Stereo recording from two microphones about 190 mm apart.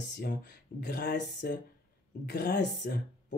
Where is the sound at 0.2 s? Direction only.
55° left (ahead or behind).